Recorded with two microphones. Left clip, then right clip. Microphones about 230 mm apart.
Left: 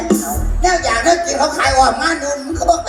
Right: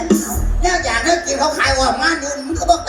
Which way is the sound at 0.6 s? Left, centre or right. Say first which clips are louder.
Left 3 dB; centre.